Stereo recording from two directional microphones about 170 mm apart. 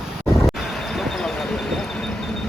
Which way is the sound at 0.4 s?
Centre (ahead or behind).